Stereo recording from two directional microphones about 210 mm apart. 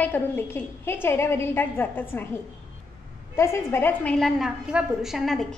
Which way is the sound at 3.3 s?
10° left (ahead or behind).